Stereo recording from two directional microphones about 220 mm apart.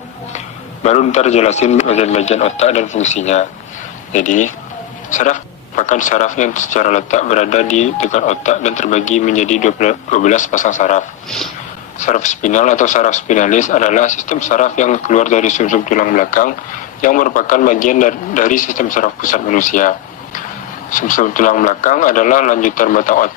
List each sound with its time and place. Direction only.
0.3 s speech: 30° left (ahead or behind)